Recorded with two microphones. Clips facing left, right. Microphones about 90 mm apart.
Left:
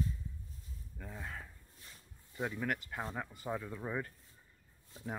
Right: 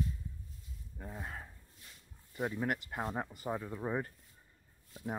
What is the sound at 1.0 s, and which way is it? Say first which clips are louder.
Speech: right 1 dB; 25° right (ahead or behind).